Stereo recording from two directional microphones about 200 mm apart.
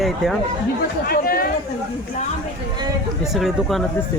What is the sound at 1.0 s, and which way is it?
Speech, 45° left (ahead or behind).